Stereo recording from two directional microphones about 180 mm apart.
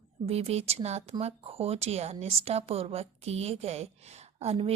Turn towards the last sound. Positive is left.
turn(degrees=-35)  # may be behind; listen again after turning